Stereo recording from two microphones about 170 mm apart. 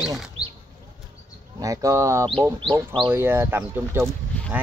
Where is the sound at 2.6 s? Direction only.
30° right (ahead or behind).